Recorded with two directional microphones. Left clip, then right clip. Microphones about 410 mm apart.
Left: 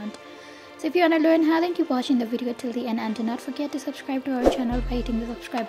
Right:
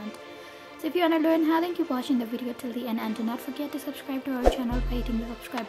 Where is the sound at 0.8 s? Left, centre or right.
Centre.